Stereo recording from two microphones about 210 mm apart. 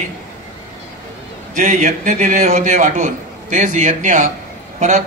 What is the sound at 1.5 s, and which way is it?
A man's voice, 35° right (ahead or behind).